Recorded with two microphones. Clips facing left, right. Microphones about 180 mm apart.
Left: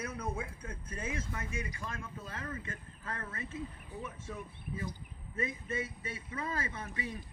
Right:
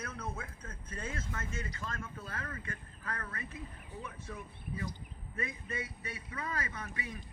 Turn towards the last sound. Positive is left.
turn(degrees=25)  # may be behind; listen again after turning